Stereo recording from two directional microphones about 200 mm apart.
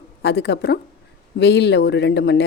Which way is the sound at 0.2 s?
55° left (ahead or behind).